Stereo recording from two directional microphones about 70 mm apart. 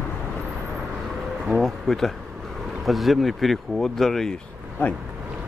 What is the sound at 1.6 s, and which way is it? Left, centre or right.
Bee, centre.